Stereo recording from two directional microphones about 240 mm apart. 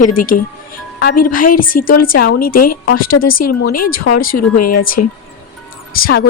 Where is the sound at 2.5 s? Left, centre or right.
Left.